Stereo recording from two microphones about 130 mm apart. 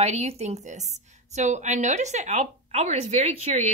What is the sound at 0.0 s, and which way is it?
A woman's voice, 55° right (ahead or behind).